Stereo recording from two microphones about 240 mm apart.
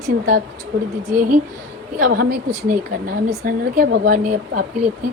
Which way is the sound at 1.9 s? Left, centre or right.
Right.